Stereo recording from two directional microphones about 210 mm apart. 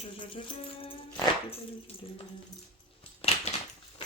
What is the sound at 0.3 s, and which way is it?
Speech, 25° left (ahead or behind).